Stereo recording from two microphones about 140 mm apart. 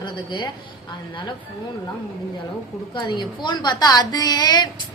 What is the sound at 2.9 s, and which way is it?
A woman's voice, 30° left (ahead or behind).